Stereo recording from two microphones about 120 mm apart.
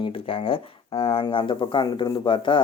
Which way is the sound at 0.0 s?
50° left (ahead or behind).